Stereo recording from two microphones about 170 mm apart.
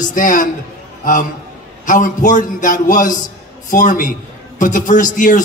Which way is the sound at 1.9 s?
50° left (ahead or behind).